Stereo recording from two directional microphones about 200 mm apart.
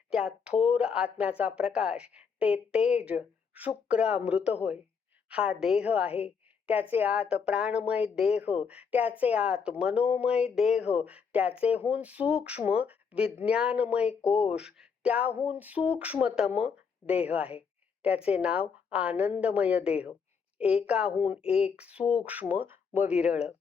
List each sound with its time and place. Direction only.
0.1 s a woman's voice: 5° right (ahead or behind)
14.3 s speech: 30° left (ahead or behind)
14.5 s a woman's voice: 5° right (ahead or behind)